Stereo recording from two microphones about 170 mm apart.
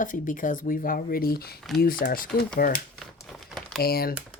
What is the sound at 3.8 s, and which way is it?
Speech, 65° left (ahead or behind).